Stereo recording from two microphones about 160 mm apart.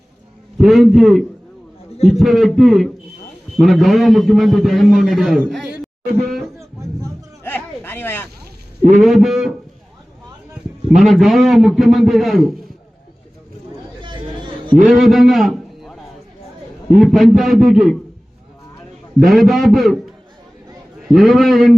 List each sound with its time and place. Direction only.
0.6 s a man's voice: centre (ahead or behind)
6.2 s a sound: centre (ahead or behind)
9.0 s a man's voice: centre (ahead or behind)
10.9 s a man's voice: centre (ahead or behind)
14.0 s chatter: 30° right (ahead or behind)
14.8 s a man's voice: centre (ahead or behind)
17.0 s a man's voice: centre (ahead or behind)
19.2 s a man's voice: centre (ahead or behind)
21.1 s a man's voice: centre (ahead or behind)